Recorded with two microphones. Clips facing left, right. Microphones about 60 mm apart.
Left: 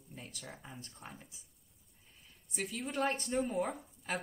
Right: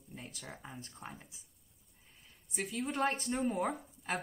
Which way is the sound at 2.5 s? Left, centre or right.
Centre.